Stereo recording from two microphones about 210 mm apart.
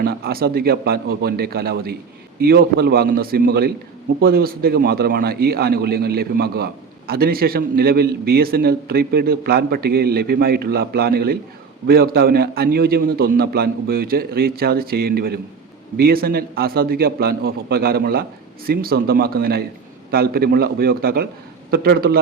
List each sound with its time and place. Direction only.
0.0 s a man's voice: 45° right (ahead or behind)